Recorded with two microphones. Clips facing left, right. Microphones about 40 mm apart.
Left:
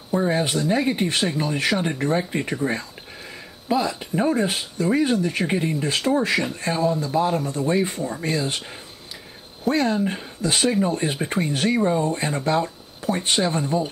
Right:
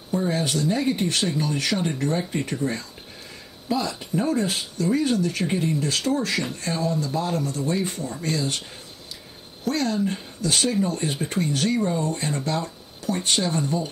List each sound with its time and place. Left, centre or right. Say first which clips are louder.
0.1 s speech: left 3 dB; left
9.7 s speech: left 3 dB; left